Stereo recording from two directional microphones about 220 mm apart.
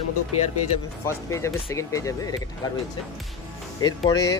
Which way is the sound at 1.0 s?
15° left (ahead or behind).